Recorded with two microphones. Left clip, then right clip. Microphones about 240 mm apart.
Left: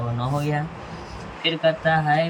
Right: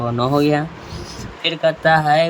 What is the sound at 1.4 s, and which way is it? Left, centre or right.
Speech, right.